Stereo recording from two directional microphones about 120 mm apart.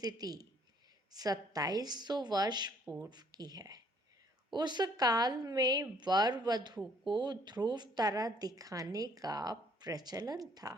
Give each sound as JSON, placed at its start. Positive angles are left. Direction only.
{"t": 0.0, "sound": "a woman's voice", "side_deg": -35}